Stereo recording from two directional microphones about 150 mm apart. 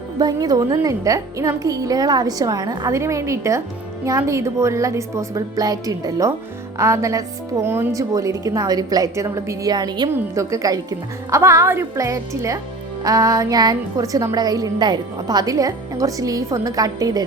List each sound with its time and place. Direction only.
0.2 s a woman's voice: 25° right (ahead or behind)